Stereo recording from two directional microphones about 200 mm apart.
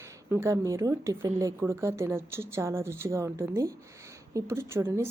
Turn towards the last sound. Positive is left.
turn(degrees=-10)  # may be behind; listen again after turning